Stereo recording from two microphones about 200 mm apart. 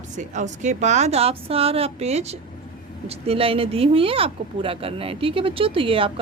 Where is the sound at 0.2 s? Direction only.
35° right (ahead or behind).